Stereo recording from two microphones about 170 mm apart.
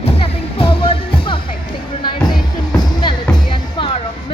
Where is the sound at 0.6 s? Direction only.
35° left (ahead or behind).